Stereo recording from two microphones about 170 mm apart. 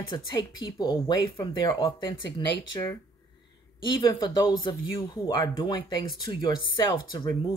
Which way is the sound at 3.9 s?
30° left (ahead or behind).